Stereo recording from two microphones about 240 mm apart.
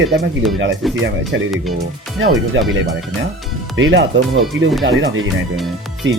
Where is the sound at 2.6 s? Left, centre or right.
Right.